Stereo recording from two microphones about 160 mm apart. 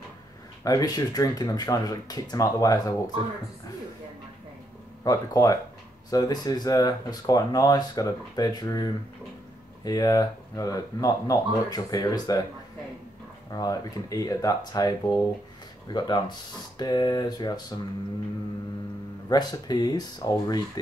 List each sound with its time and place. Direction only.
0.7 s speech: 25° left (ahead or behind)
5.0 s speech: 20° left (ahead or behind)
13.5 s speech: 20° left (ahead or behind)
19.2 s speech: 25° left (ahead or behind)